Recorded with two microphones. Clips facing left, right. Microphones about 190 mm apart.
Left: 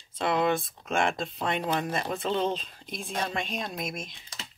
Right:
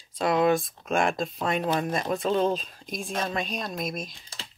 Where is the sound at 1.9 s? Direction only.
45° right (ahead or behind).